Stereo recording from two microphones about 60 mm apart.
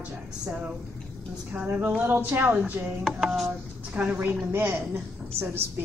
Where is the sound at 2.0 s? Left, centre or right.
Right.